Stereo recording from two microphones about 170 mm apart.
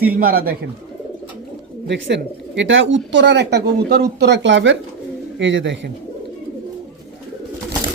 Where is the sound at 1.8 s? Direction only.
90° right.